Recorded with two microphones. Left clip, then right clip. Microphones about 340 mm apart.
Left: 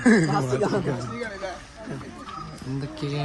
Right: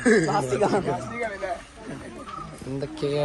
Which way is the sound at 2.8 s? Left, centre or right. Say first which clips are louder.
Right 6 dB; centre.